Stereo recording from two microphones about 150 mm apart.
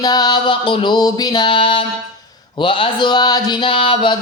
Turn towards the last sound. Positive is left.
turn(degrees=30)  # may be behind; listen again after turning